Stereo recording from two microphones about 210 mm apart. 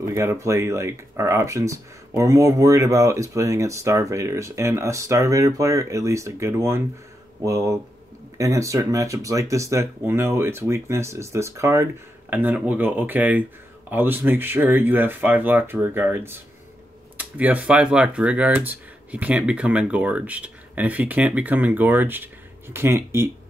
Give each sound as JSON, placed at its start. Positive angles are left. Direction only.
{"t": 0.0, "sound": "speech", "side_deg": -10}